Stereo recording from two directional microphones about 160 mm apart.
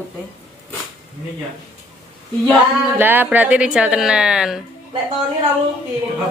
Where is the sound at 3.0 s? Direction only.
10° right (ahead or behind).